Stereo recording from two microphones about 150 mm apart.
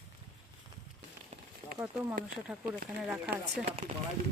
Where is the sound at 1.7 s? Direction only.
15° right (ahead or behind).